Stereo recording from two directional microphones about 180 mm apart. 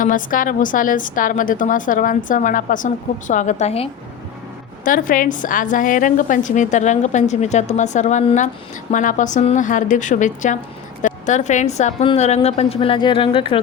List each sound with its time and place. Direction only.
0.0 s a woman's voice: 50° left (ahead or behind)
4.9 s a woman's voice: 50° left (ahead or behind); by 13.6 s 30° left (ahead or behind)